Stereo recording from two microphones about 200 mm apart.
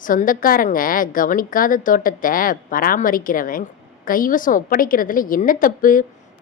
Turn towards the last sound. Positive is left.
turn(degrees=45)  # may be behind; listen again after turning